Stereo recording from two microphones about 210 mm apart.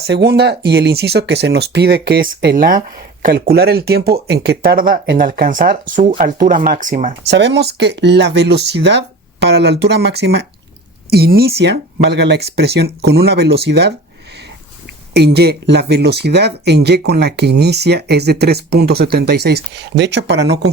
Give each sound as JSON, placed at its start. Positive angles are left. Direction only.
{"t": 0.1, "sound": "speech", "side_deg": -55}
{"t": 7.3, "sound": "speech", "side_deg": -55}
{"t": 15.1, "sound": "speech", "side_deg": -50}